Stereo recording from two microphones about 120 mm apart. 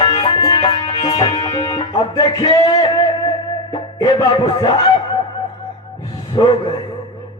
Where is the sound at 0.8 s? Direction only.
35° left (ahead or behind).